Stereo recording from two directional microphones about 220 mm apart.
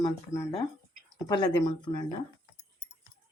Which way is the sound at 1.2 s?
20° left (ahead or behind).